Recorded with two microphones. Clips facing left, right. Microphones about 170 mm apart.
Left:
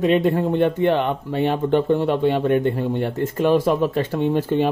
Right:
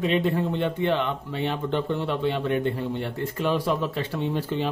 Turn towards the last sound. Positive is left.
turn(degrees=50)  # may be behind; listen again after turning